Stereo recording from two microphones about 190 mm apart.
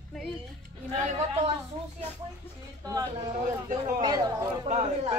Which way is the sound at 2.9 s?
25° right (ahead or behind).